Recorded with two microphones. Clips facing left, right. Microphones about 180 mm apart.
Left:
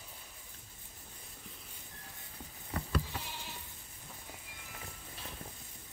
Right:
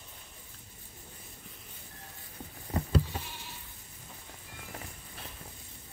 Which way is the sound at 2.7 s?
25° right (ahead or behind).